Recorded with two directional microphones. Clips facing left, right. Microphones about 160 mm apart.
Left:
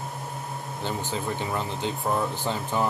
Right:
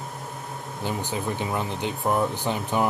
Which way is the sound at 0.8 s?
15° right (ahead or behind).